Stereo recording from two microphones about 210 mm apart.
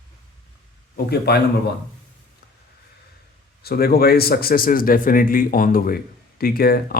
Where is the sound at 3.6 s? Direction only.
50° left (ahead or behind).